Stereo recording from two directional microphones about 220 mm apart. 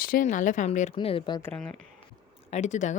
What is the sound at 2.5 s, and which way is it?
Speech, 35° left (ahead or behind).